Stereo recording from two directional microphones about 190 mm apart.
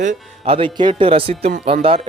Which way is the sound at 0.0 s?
35° right (ahead or behind).